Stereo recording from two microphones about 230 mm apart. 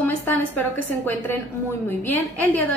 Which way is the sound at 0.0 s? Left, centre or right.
Centre.